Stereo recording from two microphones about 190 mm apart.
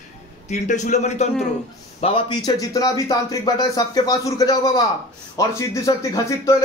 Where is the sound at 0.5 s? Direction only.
40° left (ahead or behind).